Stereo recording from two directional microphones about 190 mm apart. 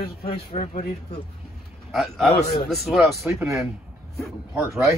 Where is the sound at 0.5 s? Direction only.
35° left (ahead or behind).